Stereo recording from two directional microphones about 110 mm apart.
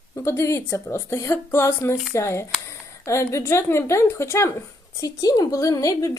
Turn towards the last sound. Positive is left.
turn(degrees=30)  # may be behind; listen again after turning